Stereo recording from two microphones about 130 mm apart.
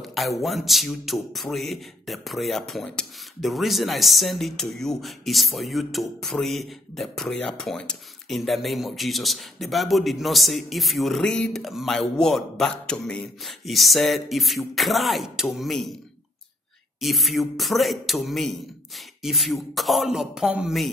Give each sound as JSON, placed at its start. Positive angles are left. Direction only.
{"t": 0.0, "sound": "a sound", "side_deg": 0}
{"t": 0.4, "sound": "a man's voice", "side_deg": 0}
{"t": 17.0, "sound": "a man's voice", "side_deg": 0}